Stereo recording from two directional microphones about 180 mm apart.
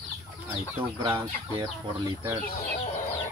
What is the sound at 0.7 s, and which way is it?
Speech, 15° right (ahead or behind).